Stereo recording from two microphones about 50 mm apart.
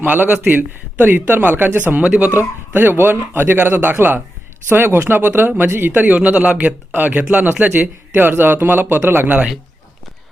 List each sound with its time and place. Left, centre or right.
0.0 s a man's voice: right
2.0 s a man's voice: right
2.7 s a man's voice: right